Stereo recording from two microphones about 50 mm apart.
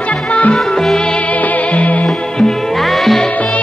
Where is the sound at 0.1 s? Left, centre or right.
Left.